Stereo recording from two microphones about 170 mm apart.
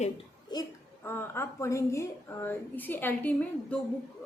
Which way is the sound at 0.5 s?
25° left (ahead or behind).